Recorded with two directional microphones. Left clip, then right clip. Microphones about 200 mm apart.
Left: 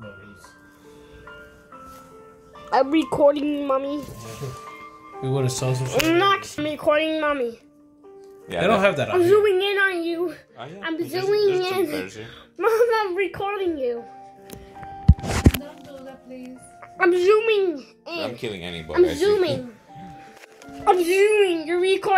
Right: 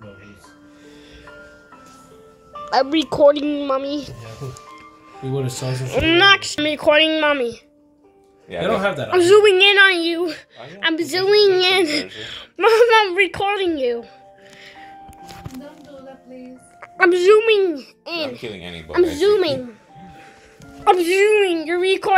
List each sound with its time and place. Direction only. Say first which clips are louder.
2.7 s a woman's voice: right 2 dB; 5° left (ahead or behind)
5.2 s speech: even; 40° left (ahead or behind)
5.9 s a child's voice: right 6 dB; centre (ahead or behind)
9.1 s a child's voice: right 8 dB; 15° right (ahead or behind)
16.8 s a child's voice: right 4 dB; 25° right (ahead or behind)
18.4 s speech: left 1 dB; 50° left (ahead or behind)
18.9 s a child's voice: right 3 dB; 20° right (ahead or behind)
20.8 s a child's voice: right 3 dB; 15° right (ahead or behind)